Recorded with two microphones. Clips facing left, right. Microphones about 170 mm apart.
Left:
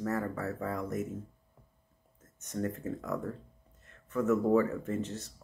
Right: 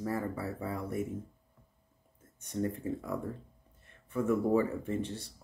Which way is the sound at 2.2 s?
10° right (ahead or behind).